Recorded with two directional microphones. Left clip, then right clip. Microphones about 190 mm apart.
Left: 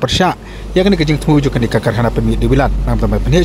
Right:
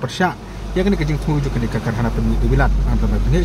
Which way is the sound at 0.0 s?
35° left (ahead or behind).